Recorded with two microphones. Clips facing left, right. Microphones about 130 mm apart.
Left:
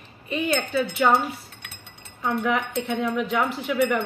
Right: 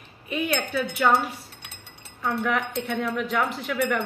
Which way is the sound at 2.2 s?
Centre (ahead or behind).